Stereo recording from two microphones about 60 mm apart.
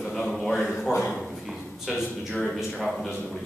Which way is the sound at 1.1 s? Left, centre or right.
Centre.